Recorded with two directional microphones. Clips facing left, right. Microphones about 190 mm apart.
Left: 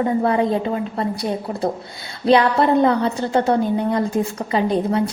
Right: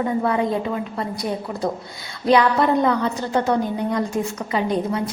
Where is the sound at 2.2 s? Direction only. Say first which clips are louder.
Left 2 dB; 30° left (ahead or behind).